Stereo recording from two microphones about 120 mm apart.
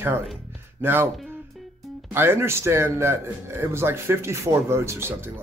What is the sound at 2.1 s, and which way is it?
Speech, 20° right (ahead or behind).